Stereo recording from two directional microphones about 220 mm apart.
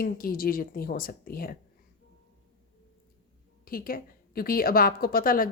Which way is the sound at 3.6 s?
40° left (ahead or behind).